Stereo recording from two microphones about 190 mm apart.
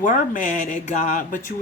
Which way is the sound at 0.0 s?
40° left (ahead or behind).